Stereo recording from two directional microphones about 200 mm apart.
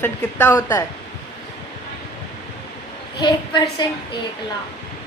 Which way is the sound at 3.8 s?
20° left (ahead or behind).